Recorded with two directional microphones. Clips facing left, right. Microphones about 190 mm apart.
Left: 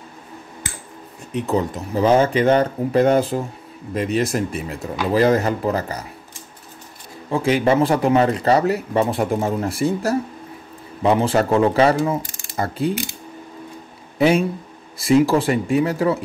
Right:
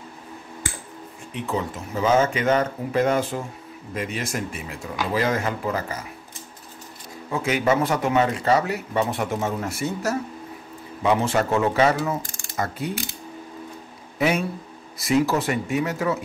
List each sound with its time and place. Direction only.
1.3 s speech: 40° left (ahead or behind)
7.2 s speech: 30° left (ahead or behind)
14.1 s a man's voice: 30° left (ahead or behind)